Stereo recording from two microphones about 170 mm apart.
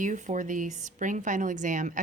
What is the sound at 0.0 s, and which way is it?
A woman's voice, 45° right (ahead or behind).